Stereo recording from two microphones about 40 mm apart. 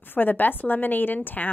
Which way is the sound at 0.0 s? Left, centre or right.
Left.